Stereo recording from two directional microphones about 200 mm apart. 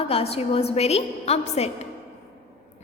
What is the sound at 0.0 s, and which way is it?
A woman's voice, 30° left (ahead or behind).